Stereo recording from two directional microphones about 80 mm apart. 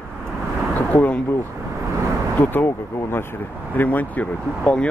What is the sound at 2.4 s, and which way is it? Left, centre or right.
Speech, left.